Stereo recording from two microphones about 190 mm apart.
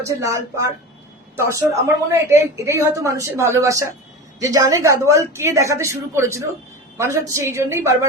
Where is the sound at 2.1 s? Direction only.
15° right (ahead or behind).